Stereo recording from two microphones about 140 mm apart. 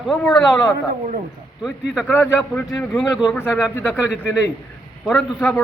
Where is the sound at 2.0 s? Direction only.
15° left (ahead or behind).